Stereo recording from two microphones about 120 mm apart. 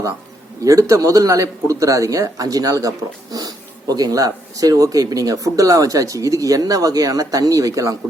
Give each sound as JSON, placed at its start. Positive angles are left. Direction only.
{"t": 0.6, "sound": "speech", "side_deg": -25}